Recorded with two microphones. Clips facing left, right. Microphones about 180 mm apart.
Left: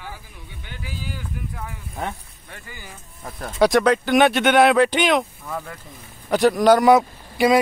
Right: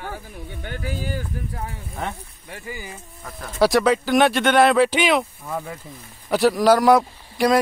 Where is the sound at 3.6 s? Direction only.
Centre (ahead or behind).